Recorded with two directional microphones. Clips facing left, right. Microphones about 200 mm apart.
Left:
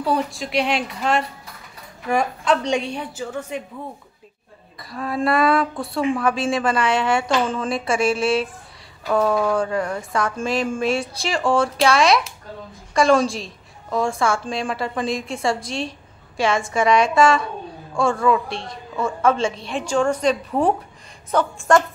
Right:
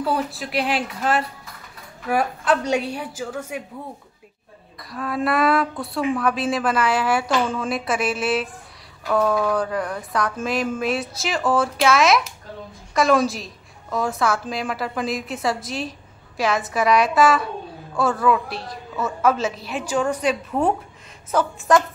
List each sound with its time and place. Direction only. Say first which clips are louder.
0.0 s a woman's voice: left 1 dB; centre (ahead or behind)
4.7 s a woman's voice: left 1 dB; centre (ahead or behind)
9.5 s a woman's voice: left 2 dB; centre (ahead or behind)